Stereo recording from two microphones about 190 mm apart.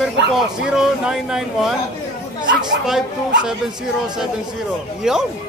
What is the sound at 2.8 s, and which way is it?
Speech, 5° right (ahead or behind).